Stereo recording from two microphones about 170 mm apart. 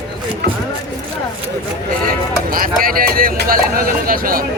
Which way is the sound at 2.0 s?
55° right (ahead or behind).